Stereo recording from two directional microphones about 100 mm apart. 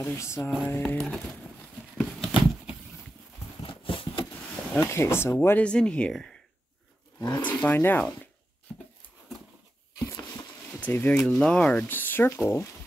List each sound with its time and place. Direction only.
0.0 s speech: 30° left (ahead or behind)
0.8 s speech: 10° left (ahead or behind)
2.0 s a sound: centre (ahead or behind)
3.6 s a sound: 60° left (ahead or behind)
4.7 s speech: 25° left (ahead or behind)
5.6 s speech: 10° left (ahead or behind)
7.2 s speech: 40° left (ahead or behind)
7.6 s speech: 20° left (ahead or behind)
10.0 s a sound: 30° left (ahead or behind)
10.8 s speech: 20° left (ahead or behind)